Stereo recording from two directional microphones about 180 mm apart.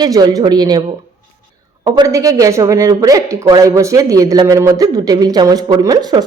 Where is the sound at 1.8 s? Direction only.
20° right (ahead or behind).